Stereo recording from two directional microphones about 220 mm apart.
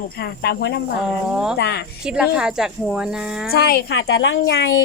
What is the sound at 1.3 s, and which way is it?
Speech, 5° right (ahead or behind).